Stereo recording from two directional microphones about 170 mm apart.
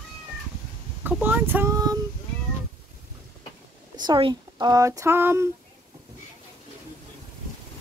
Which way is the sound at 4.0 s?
25° right (ahead or behind).